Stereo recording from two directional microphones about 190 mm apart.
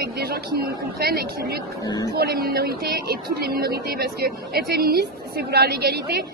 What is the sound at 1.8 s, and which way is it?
Speech, 20° left (ahead or behind).